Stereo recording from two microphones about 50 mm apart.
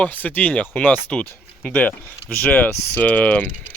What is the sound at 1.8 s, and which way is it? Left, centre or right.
Speech, left.